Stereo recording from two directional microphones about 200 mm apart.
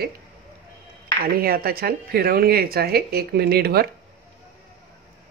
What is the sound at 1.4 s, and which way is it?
Speech, 50° right (ahead or behind).